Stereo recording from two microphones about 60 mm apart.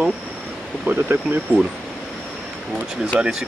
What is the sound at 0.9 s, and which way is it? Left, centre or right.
Speech, right.